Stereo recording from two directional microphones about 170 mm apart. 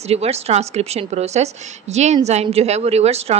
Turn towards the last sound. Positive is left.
turn(degrees=-40)  # may be behind; listen again after turning